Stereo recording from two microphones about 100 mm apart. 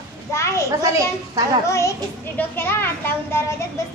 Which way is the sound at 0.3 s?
30° left (ahead or behind).